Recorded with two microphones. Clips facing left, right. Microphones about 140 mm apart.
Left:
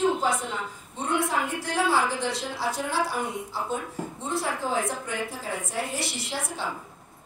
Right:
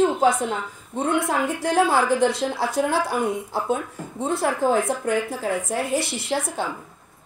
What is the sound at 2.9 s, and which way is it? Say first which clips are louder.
Speech: right 5 dB; 55° right (ahead or behind).